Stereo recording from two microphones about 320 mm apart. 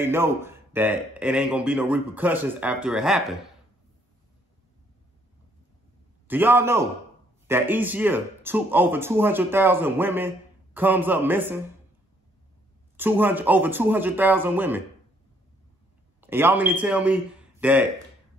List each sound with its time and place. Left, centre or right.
0.0 s speech: centre
6.2 s speech: centre
12.9 s speech: centre
16.2 s a man's voice: centre